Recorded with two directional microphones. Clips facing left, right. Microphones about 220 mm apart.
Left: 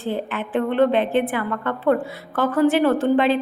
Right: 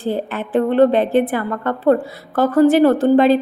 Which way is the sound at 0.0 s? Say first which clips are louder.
Right 4 dB; 40° right (ahead or behind).